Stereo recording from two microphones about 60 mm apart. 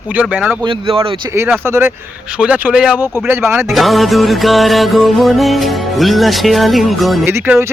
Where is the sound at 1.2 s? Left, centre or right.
Right.